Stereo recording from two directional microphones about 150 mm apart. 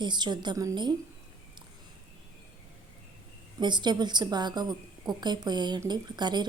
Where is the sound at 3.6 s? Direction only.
30° right (ahead or behind).